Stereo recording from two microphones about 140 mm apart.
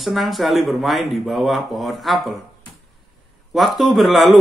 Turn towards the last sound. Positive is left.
turn(degrees=0)  # may be behind; listen again after turning